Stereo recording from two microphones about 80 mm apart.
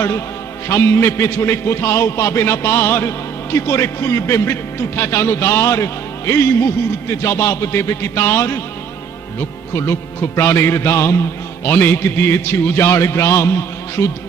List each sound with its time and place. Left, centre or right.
0.7 s a man's voice: left